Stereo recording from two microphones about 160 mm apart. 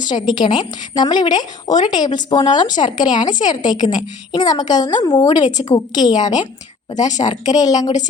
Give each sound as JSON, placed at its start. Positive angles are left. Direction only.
{"t": 0.0, "sound": "a woman's voice", "side_deg": 25}